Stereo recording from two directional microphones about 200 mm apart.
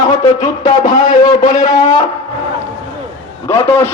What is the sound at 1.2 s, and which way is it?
Speech, 20° left (ahead or behind).